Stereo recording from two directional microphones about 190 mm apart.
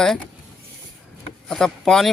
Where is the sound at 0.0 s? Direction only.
5° left (ahead or behind).